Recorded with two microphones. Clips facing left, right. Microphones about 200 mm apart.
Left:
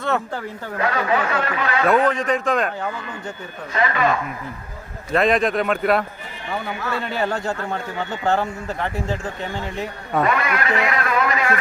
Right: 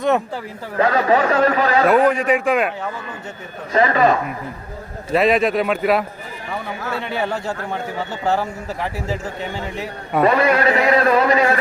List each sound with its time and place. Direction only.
0.8 s a man's voice: 35° right (ahead or behind)
2.0 s a man's voice: 10° right (ahead or behind)
3.7 s a man's voice: 35° right (ahead or behind)
5.1 s speech: 5° right (ahead or behind)
10.2 s a man's voice: 35° right (ahead or behind)